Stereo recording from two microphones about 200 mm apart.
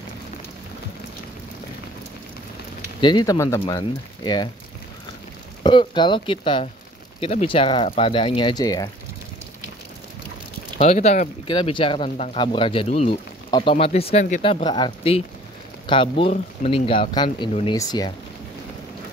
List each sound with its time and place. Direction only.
3.0 s speech: 20° left (ahead or behind)
5.6 s speech: 25° left (ahead or behind)
10.8 s speech: 35° left (ahead or behind)